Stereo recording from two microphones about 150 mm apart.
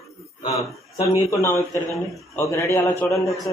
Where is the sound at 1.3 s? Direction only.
20° left (ahead or behind).